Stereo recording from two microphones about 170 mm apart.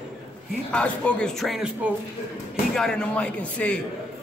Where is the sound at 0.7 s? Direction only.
5° left (ahead or behind).